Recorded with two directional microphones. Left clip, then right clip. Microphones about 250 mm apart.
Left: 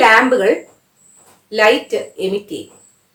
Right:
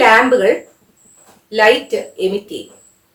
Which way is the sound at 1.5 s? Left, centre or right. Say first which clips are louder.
Right 1 dB; centre.